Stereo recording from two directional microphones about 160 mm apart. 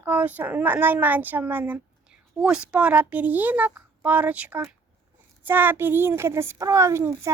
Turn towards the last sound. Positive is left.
turn(degrees=-15)  # may be behind; listen again after turning